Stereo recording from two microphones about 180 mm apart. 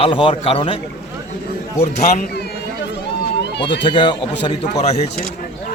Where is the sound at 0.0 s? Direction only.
30° left (ahead or behind).